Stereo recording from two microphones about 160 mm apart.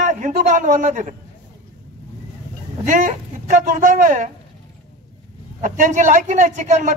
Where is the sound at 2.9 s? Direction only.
50° right (ahead or behind).